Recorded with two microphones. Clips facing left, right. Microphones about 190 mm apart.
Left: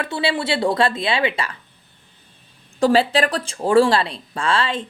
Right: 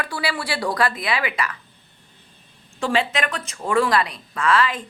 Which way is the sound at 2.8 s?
35° left (ahead or behind).